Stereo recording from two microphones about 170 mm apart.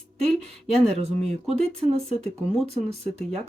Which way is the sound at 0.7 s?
40° right (ahead or behind).